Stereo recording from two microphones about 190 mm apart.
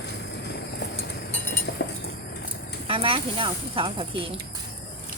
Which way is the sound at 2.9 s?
30° right (ahead or behind).